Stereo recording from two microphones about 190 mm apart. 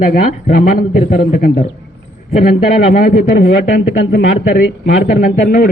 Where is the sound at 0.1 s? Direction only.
50° left (ahead or behind).